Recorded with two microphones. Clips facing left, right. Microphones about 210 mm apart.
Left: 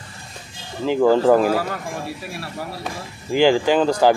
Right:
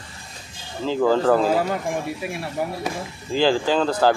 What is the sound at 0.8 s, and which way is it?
Speech, 15° left (ahead or behind).